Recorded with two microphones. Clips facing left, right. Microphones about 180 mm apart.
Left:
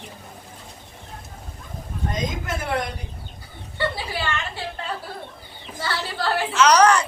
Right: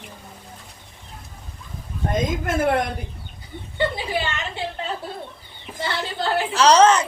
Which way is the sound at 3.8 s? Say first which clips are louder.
Right 3 dB; 20° right (ahead or behind).